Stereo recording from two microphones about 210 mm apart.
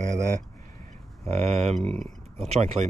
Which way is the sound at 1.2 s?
30° right (ahead or behind).